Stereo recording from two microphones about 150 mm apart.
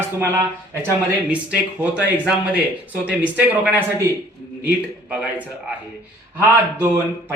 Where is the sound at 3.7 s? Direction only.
15° right (ahead or behind).